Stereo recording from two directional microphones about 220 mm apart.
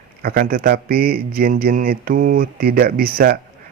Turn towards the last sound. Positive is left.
turn(degrees=-45)  # may be behind; listen again after turning